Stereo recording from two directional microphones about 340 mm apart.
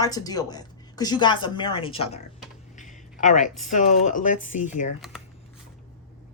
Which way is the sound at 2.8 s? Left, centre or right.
Left.